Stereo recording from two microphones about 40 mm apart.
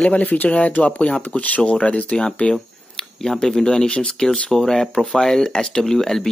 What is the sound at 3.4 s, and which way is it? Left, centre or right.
Speech, centre.